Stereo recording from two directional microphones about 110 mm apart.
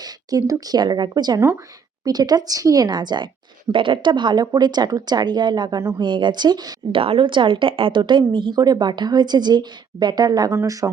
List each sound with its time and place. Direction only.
0.0 s a woman's voice: 35° right (ahead or behind)
6.9 s a woman's voice: 55° right (ahead or behind); by 10.5 s 40° right (ahead or behind)
10.5 s speech: 30° right (ahead or behind)